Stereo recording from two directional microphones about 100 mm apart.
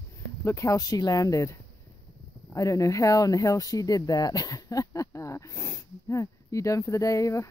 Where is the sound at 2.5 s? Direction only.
35° left (ahead or behind).